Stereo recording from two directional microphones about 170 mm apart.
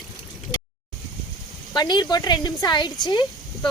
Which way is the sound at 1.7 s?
25° left (ahead or behind).